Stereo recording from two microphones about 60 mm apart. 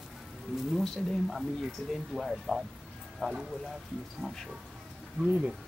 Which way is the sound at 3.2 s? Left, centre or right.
Centre.